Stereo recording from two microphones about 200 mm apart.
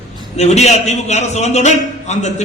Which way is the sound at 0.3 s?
35° left (ahead or behind).